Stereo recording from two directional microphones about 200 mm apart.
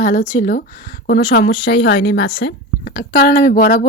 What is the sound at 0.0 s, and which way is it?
Speech, 45° left (ahead or behind).